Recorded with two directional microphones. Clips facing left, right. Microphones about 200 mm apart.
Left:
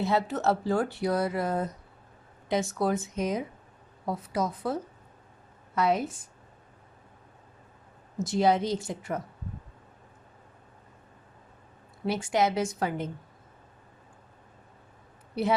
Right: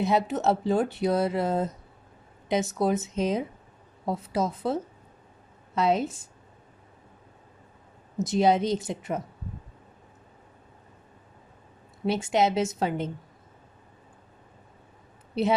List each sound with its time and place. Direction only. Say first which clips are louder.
0.0 s speech: right 2 dB; 20° right (ahead or behind)
8.2 s speech: right 2 dB; 20° right (ahead or behind)
12.0 s speech: right 2 dB; 25° right (ahead or behind)
15.3 s speech: right 3 dB; 25° right (ahead or behind)